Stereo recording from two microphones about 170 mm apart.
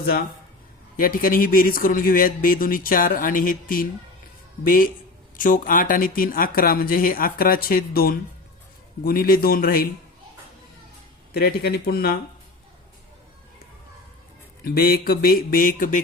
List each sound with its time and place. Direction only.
0.0 s speech: 65° left (ahead or behind)
11.3 s speech: 65° left (ahead or behind)
14.6 s speech: 65° left (ahead or behind)